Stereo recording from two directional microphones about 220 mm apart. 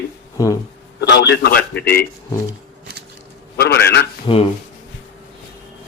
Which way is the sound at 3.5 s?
45° left (ahead or behind).